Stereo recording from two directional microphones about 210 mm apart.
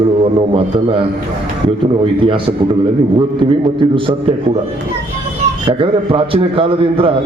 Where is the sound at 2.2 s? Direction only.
25° right (ahead or behind).